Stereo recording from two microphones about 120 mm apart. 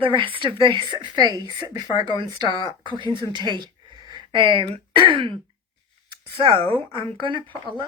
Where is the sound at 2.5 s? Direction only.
45° left (ahead or behind).